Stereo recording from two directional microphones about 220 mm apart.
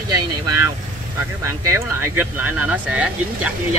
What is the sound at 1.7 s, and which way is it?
Speech, 10° right (ahead or behind).